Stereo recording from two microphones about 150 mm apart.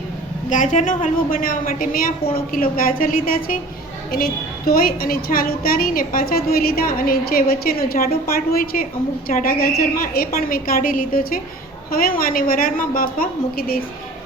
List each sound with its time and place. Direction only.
0.5 s a woman's voice: 55° left (ahead or behind); by 13.8 s 80° left